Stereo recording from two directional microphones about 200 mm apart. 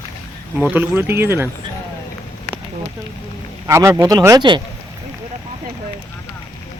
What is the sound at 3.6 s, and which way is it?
Speech, 15° right (ahead or behind).